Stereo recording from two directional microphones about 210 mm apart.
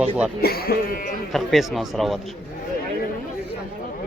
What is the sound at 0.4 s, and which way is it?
Speech, 45° left (ahead or behind).